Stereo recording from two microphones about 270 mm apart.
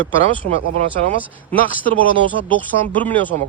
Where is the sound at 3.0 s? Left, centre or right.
Centre.